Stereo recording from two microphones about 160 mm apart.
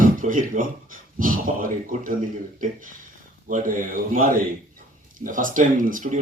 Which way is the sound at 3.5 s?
60° right (ahead or behind).